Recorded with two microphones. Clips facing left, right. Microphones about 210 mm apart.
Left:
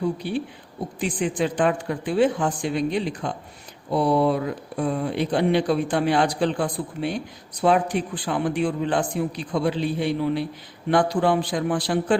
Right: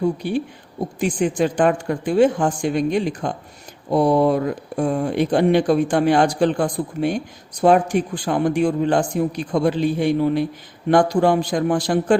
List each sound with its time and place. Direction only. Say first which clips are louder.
0.2 s speech: right 4 dB; 45° right (ahead or behind)